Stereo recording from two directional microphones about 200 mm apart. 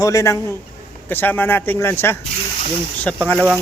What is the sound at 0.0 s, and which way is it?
Speech, 15° left (ahead or behind).